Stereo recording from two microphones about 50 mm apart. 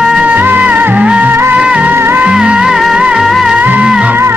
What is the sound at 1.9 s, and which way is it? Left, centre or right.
Music, right.